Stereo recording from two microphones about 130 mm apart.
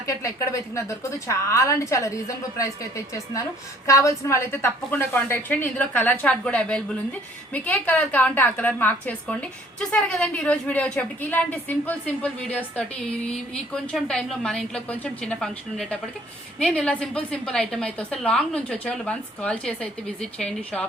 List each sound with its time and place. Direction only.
0.1 s a woman's voice: 25° left (ahead or behind)
3.8 s a woman's voice: 25° left (ahead or behind)
13.9 s a woman's voice: centre (ahead or behind)